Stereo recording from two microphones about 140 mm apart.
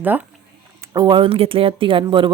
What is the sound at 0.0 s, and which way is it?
Speech, 15° right (ahead or behind).